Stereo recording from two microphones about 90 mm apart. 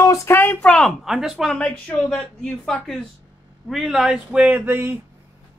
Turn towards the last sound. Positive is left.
turn(degrees=-25)  # may be behind; listen again after turning